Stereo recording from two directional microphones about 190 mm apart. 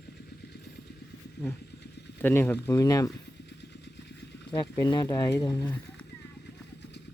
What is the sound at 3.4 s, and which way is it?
Vehicle, 65° left (ahead or behind).